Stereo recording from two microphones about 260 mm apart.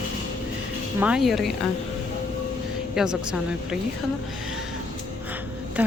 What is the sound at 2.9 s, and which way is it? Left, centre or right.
Speech, centre.